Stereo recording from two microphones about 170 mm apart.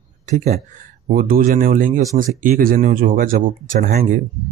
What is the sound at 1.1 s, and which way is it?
Speech, 55° right (ahead or behind).